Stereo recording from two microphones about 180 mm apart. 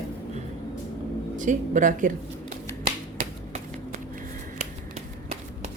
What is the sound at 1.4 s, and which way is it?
Speech, 45° right (ahead or behind).